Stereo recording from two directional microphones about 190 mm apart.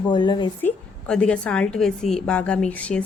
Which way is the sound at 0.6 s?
5° left (ahead or behind).